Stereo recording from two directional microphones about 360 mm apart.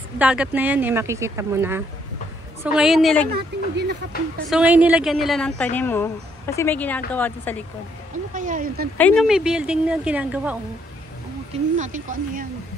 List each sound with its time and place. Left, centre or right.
0.2 s a woman's voice: centre
3.5 s speech: right
4.5 s a woman's voice: centre
8.3 s speech: right
8.9 s a woman's voice: centre
11.5 s speech: centre